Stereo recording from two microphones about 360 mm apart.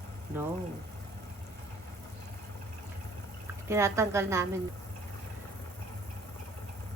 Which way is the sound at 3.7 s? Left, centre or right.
Centre.